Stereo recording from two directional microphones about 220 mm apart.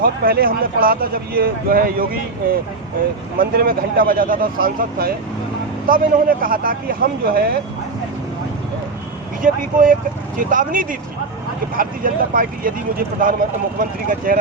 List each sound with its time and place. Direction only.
0.0 s speech: 40° right (ahead or behind)
9.4 s speech: 35° right (ahead or behind)